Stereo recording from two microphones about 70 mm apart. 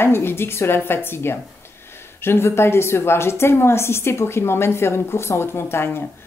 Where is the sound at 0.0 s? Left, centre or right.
Left.